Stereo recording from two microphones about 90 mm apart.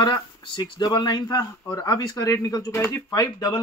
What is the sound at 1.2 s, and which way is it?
A man's voice, 45° left (ahead or behind).